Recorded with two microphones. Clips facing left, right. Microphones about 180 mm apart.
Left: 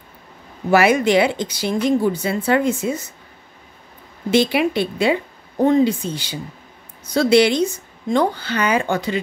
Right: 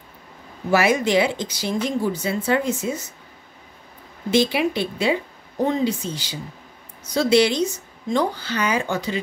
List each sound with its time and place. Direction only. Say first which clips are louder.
0.7 s speech: left 4 dB; 60° left (ahead or behind)
4.3 s speech: left 3 dB; 60° left (ahead or behind)